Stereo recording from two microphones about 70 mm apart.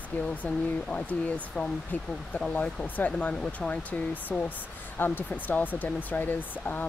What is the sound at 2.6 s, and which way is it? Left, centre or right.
Speech, left.